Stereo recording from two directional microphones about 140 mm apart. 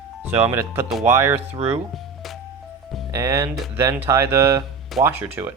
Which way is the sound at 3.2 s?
25° right (ahead or behind).